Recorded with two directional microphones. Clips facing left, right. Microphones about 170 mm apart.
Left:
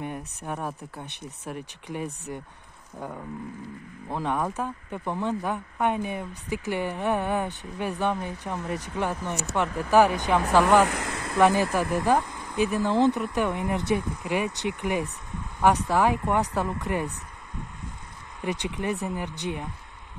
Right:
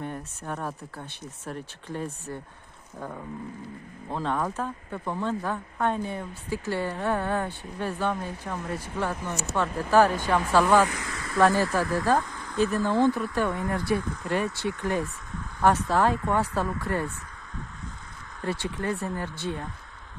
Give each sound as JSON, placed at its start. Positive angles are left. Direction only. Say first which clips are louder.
{"t": 0.0, "sound": "speech", "louder": "left 1 dB", "side_deg": 15}
{"t": 3.0, "sound": "wild animals", "louder": "left 1 dB", "side_deg": 5}
{"t": 4.1, "sound": "speech", "louder": "left 1 dB", "side_deg": 15}
{"t": 10.9, "sound": "speech", "louder": "left 4 dB", "side_deg": 55}
{"t": 11.3, "sound": "speech", "louder": "left 1 dB", "side_deg": 15}
{"t": 18.4, "sound": "speech", "louder": "left 1 dB", "side_deg": 15}